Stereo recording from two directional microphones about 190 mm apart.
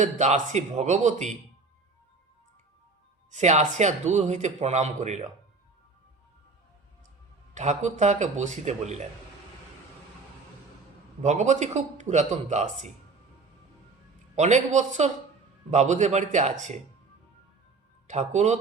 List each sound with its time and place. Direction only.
0.0 s a man's voice: 40° right (ahead or behind)
3.3 s a man's voice: 40° right (ahead or behind)
7.5 s a man's voice: 40° right (ahead or behind)
11.2 s a man's voice: 40° right (ahead or behind)
14.3 s a man's voice: 35° right (ahead or behind)
18.1 s a man's voice: 40° right (ahead or behind)